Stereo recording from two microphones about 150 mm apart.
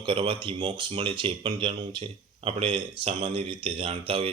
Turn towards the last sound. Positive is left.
turn(degrees=-40)  # may be behind; listen again after turning